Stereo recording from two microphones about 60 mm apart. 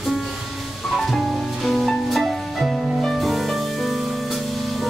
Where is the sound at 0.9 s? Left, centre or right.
Centre.